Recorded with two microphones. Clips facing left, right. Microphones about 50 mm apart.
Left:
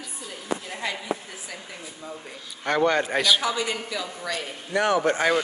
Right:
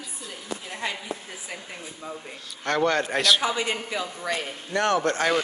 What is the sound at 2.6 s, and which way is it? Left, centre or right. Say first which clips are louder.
Speech: left 1 dB; centre.